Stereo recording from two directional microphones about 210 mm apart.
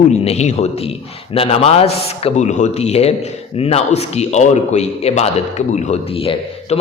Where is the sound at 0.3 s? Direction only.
30° left (ahead or behind).